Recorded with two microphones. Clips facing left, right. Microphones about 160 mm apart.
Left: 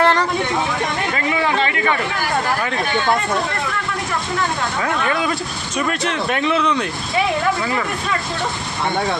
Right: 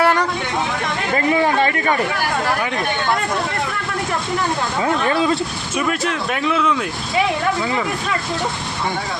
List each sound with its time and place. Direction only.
0.0 s vehicle: 10° right (ahead or behind)
1.1 s a sound: 40° right (ahead or behind)
5.0 s speech: 30° right (ahead or behind)
5.7 s speech: 5° right (ahead or behind)